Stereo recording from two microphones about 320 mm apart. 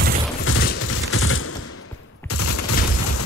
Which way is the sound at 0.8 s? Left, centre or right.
Left.